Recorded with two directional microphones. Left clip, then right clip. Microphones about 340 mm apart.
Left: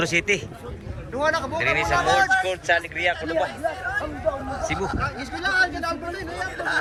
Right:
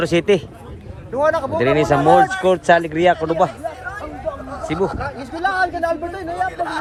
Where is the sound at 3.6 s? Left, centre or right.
Left.